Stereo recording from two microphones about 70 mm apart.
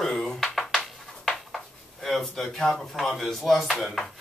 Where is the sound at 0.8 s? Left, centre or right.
Centre.